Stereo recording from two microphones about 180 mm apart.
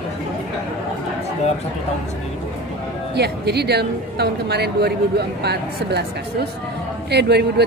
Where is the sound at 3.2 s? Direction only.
65° right (ahead or behind).